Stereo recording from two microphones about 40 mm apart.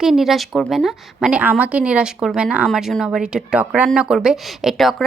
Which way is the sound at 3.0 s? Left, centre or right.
Centre.